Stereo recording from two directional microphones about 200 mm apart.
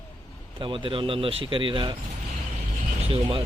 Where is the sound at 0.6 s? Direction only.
25° right (ahead or behind).